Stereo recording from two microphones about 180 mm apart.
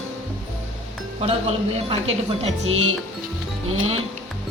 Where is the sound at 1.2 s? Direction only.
35° right (ahead or behind).